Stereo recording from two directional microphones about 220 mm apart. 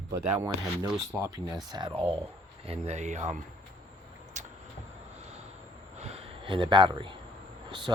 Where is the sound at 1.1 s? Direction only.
15° right (ahead or behind); by 3.4 s 30° right (ahead or behind).